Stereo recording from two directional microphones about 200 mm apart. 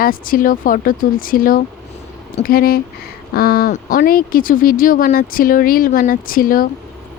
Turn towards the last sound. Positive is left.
turn(degrees=45)  # may be behind; listen again after turning